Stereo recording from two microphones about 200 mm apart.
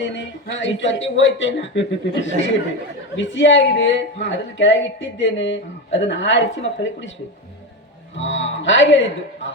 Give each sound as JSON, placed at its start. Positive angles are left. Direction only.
{"t": 0.6, "sound": "speech", "side_deg": 65}
{"t": 8.2, "sound": "a man's voice", "side_deg": 70}